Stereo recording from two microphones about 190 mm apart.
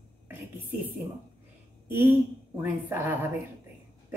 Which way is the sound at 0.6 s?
10° right (ahead or behind).